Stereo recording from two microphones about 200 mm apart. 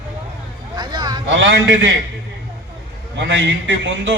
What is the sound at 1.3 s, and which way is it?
Speech, 65° right (ahead or behind).